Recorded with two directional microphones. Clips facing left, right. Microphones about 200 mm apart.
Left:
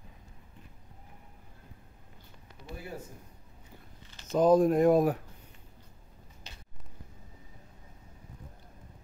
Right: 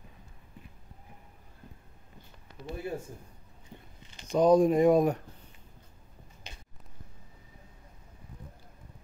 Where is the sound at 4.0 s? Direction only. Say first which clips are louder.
Right 1 dB; 15° right (ahead or behind).